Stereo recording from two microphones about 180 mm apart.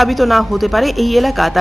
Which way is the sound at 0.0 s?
Centre (ahead or behind).